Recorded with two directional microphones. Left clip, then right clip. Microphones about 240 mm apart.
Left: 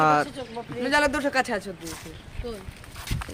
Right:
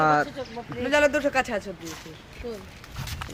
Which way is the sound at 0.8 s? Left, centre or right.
Left.